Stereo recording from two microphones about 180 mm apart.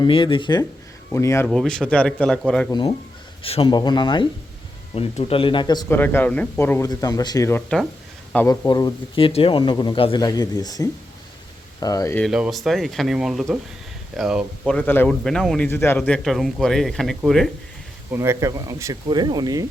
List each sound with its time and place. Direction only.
0.0 s speech: 30° left (ahead or behind)
1.1 s speech: 15° left (ahead or behind)
1.5 s speech: centre (ahead or behind)
3.4 s speech: 30° left (ahead or behind)
5.9 s speech: 10° left (ahead or behind)
12.2 s speech: centre (ahead or behind)
14.8 s speech: 10° left (ahead or behind)
18.1 s speech: 15° right (ahead or behind)